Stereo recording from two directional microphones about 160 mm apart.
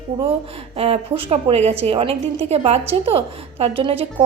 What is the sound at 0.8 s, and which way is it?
A woman's voice, 35° right (ahead or behind).